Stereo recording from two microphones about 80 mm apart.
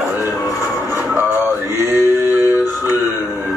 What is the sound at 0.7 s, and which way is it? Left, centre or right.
Music, right.